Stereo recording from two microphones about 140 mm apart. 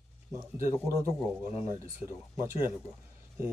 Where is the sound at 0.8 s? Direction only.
25° right (ahead or behind).